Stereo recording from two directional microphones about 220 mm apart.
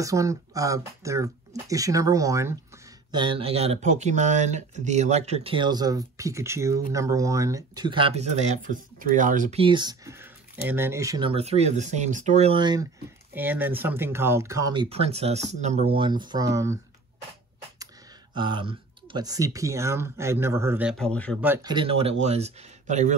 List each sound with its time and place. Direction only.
0.0 s speech: 15° right (ahead or behind); by 9.6 s 35° right (ahead or behind)
9.6 s speech: 20° right (ahead or behind)
13.3 s speech: 10° right (ahead or behind)
14.9 s speech: 25° right (ahead or behind)
18.3 s speech: 20° right (ahead or behind)
20.9 s speech: 5° left (ahead or behind)
21.6 s speech: 25° right (ahead or behind)